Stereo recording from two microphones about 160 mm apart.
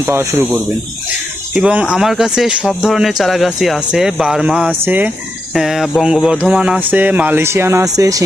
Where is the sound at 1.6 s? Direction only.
5° right (ahead or behind).